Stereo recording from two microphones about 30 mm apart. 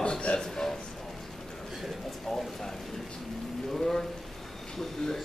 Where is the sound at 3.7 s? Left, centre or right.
Centre.